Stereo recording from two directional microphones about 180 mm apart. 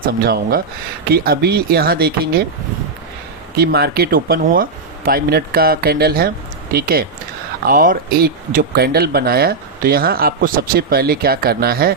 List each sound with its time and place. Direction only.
0.0 s speech: 60° right (ahead or behind)
3.6 s speech: 65° right (ahead or behind)